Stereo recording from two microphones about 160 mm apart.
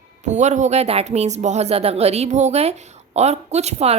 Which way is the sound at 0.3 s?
50° right (ahead or behind).